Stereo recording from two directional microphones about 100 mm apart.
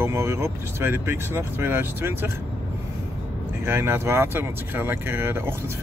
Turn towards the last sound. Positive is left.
turn(degrees=-25)  # may be behind; listen again after turning